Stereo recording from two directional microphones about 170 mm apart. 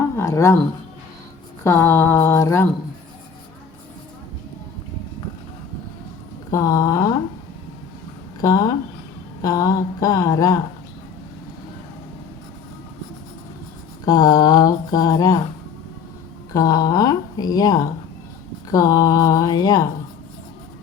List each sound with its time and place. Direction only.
0.2 s speech: 15° left (ahead or behind)
1.6 s a sound: 15° left (ahead or behind)
6.5 s speech: 20° left (ahead or behind)
8.4 s speech: 20° left (ahead or behind)
14.0 s speech: 25° left (ahead or behind)
16.5 s speech: 20° left (ahead or behind)